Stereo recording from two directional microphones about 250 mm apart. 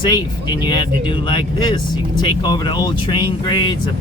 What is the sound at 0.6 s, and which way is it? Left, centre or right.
Speech, centre.